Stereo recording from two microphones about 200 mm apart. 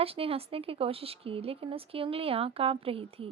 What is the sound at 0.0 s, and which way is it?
A woman's voice, 30° right (ahead or behind).